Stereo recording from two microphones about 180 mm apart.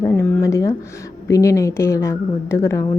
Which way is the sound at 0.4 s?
15° left (ahead or behind).